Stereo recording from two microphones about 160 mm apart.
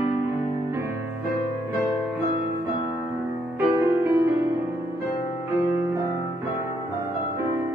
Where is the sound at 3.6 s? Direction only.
10° right (ahead or behind).